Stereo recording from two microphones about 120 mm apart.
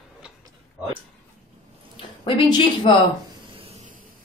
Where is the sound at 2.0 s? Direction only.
45° left (ahead or behind).